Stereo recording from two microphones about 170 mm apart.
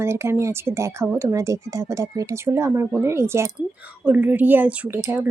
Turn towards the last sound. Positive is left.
turn(degrees=-10)  # may be behind; listen again after turning